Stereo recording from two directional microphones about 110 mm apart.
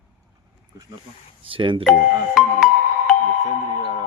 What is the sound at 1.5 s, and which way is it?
Speech, 55° right (ahead or behind).